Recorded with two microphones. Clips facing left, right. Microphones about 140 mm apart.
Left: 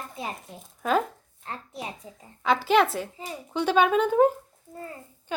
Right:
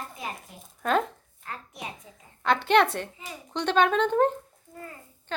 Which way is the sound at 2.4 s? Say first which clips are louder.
Even; 5° left (ahead or behind).